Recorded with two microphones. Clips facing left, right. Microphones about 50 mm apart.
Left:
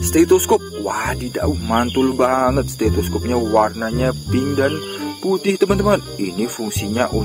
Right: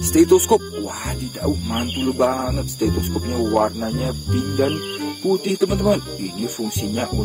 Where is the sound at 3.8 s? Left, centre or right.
Left.